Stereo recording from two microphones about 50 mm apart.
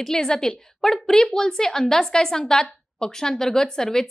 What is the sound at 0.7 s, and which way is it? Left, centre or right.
A woman's voice, centre.